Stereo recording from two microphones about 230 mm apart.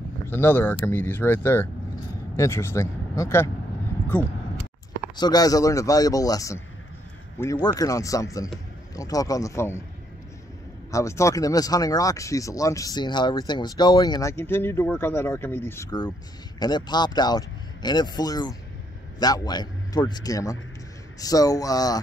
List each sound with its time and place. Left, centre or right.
0.3 s speech: centre
5.1 s speech: centre
7.6 s speech: centre
10.9 s a man's voice: centre